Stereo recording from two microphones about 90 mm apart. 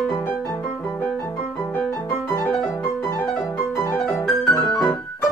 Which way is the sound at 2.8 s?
30° left (ahead or behind).